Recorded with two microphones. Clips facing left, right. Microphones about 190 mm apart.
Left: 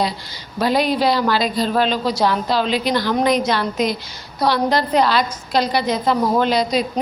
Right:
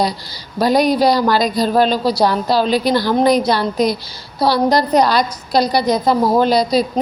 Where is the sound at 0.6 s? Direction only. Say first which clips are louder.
Right 4 dB; 40° right (ahead or behind).